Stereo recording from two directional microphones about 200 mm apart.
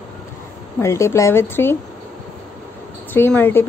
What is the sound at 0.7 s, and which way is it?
A woman's voice, 15° left (ahead or behind).